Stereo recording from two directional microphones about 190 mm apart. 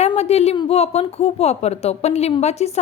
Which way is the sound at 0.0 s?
35° left (ahead or behind).